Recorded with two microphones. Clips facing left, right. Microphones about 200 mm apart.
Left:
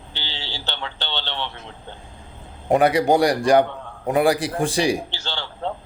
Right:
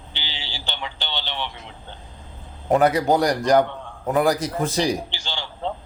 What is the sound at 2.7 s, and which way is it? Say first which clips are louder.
A man's voice: left 1 dB; 15° left (ahead or behind).